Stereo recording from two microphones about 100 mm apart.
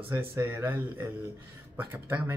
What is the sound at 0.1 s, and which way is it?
Speech, 25° right (ahead or behind).